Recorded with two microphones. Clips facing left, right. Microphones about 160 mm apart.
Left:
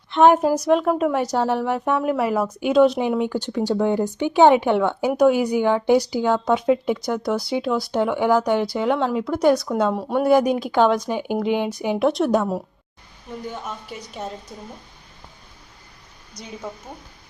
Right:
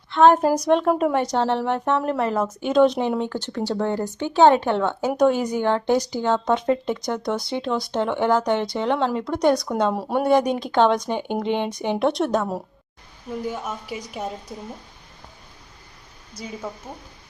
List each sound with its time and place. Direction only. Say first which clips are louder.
0.1 s speech: even; 20° left (ahead or behind)
0.4 s a woman's voice: even; 5° left (ahead or behind)
13.4 s a woman's voice: right 2 dB; 10° right (ahead or behind)
16.6 s a woman's voice: left 1 dB; centre (ahead or behind)